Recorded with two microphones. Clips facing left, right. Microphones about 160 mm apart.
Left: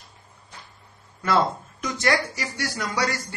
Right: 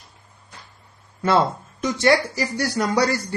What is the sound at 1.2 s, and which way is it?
Speech, 25° right (ahead or behind).